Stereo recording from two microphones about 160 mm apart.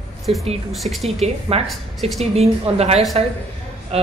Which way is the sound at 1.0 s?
40° right (ahead or behind).